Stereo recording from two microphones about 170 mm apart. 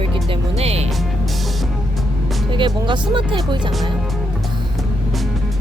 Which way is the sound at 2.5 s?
30° right (ahead or behind).